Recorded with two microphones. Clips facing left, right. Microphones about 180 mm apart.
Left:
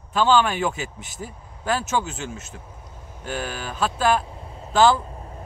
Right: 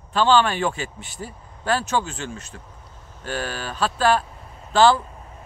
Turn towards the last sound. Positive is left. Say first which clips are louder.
# right 1 dB
turn(degrees=30)  # may be behind; listen again after turning